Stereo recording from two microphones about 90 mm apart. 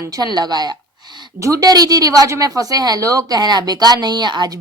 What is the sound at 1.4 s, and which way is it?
A woman's voice, 35° right (ahead or behind).